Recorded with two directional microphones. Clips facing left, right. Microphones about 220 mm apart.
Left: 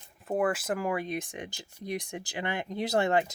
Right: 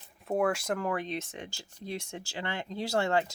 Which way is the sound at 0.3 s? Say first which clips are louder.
Even; centre (ahead or behind).